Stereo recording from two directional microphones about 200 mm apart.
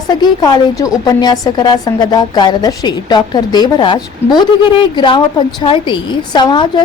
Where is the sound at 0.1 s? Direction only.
20° left (ahead or behind).